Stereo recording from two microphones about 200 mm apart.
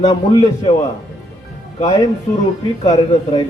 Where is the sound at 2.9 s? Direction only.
25° left (ahead or behind).